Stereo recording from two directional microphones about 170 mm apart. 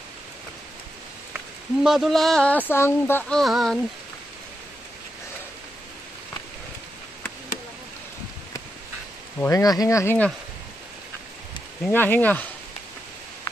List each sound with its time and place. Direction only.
1.3 s speech: 5° right (ahead or behind)
9.4 s speech: 20° left (ahead or behind)
11.8 s speech: 10° left (ahead or behind)